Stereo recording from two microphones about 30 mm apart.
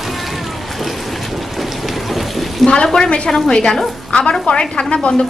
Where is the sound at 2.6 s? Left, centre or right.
Left.